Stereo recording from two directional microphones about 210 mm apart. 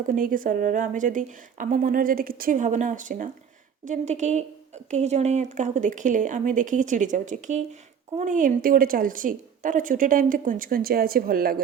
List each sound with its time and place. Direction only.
0.1 s a woman's voice: 40° right (ahead or behind)